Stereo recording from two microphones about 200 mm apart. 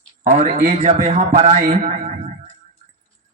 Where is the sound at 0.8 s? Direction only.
30° right (ahead or behind).